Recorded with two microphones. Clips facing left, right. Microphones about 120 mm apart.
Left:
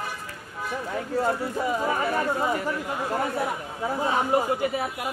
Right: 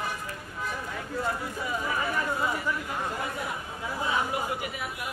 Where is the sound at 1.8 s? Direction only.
40° left (ahead or behind).